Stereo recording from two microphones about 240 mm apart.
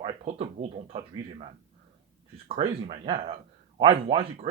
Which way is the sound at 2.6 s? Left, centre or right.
Right.